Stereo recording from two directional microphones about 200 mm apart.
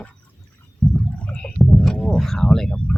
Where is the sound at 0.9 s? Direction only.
5° left (ahead or behind).